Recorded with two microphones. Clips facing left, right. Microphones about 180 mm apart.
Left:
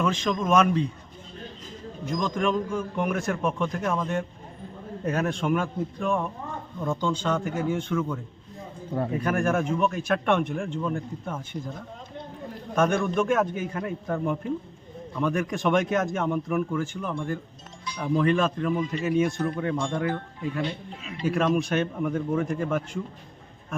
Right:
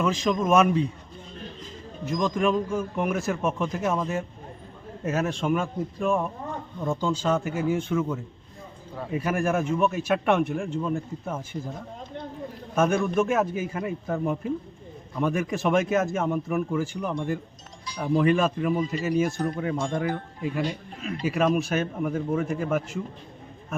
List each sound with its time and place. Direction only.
0.0 s speech: 5° right (ahead or behind)
2.0 s speech: 5° right (ahead or behind)
12.7 s a man's voice: 5° right (ahead or behind)
20.7 s speech: 45° right (ahead or behind)
21.2 s speech: 5° right (ahead or behind)